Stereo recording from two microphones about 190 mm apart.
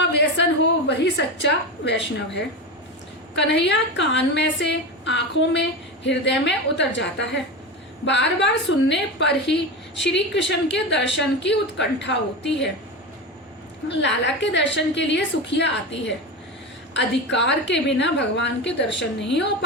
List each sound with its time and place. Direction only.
0.9 s a woman's voice: 65° left (ahead or behind)
13.8 s a woman's voice: 70° left (ahead or behind)